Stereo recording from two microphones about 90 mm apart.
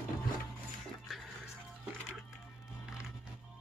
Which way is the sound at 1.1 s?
Centre (ahead or behind).